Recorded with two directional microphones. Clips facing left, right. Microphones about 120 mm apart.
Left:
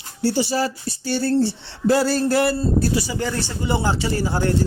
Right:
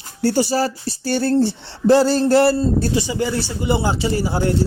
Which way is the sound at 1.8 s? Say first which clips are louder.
Right 4 dB; 30° right (ahead or behind).